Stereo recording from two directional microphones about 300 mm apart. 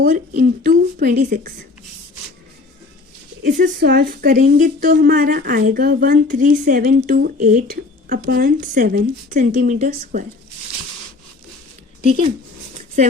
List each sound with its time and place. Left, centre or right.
0.0 s speech: right
3.4 s speech: right
12.0 s speech: centre